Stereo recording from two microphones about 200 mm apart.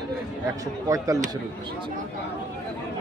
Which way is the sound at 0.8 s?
15° right (ahead or behind).